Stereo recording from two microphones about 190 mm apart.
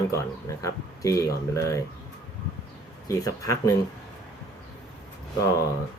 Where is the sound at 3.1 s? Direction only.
15° left (ahead or behind).